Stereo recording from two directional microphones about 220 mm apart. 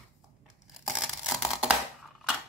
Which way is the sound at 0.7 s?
Centre (ahead or behind).